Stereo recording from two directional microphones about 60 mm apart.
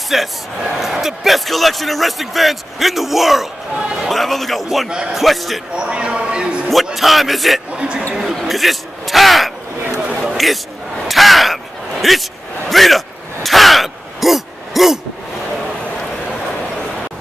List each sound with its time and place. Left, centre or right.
0.1 s a man's voice: centre
4.8 s speech: centre
5.1 s a man's voice: centre
5.8 s a sound: centre
6.7 s a man's voice: centre
7.7 s speech: centre
8.1 s a man's voice: centre
10.2 s chatter: centre
11.1 s a sound: centre